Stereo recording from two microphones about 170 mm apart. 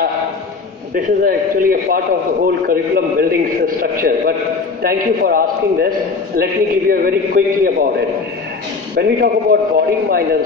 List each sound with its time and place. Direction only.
0.9 s a man's voice: 55° right (ahead or behind)
8.9 s a man's voice: 65° right (ahead or behind)